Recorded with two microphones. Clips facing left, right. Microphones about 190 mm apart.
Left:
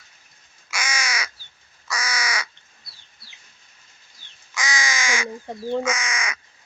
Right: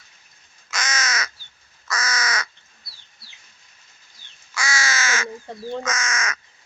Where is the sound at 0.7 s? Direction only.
10° left (ahead or behind).